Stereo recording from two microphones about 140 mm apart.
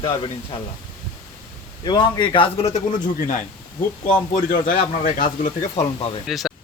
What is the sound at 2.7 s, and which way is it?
Speech, 65° left (ahead or behind).